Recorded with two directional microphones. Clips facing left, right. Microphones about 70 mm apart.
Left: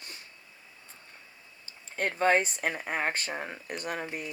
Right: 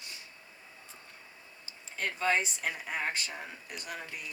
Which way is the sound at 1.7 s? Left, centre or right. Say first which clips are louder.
Left 4 dB; left.